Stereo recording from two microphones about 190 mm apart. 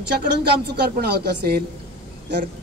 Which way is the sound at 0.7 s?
60° right (ahead or behind).